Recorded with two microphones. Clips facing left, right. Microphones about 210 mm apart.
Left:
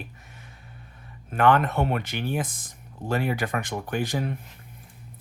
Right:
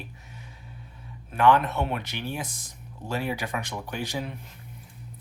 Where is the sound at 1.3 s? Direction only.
55° left (ahead or behind).